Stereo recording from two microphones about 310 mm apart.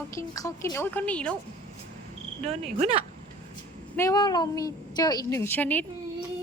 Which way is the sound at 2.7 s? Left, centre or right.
Centre.